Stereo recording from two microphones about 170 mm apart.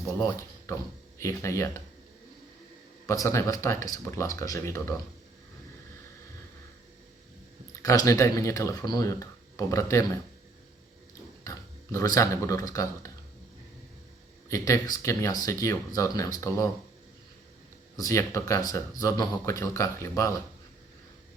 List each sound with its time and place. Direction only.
0.2 s speech: 15° left (ahead or behind)
3.1 s speech: 15° left (ahead or behind)
7.8 s speech: 20° left (ahead or behind)
11.4 s speech: 15° left (ahead or behind)
14.5 s speech: 20° left (ahead or behind)
17.9 s speech: 20° left (ahead or behind)